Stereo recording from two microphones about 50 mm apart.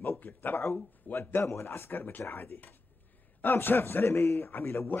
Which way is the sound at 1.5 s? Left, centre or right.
Left.